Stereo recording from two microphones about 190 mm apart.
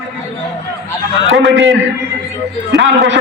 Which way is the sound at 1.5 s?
Centre (ahead or behind).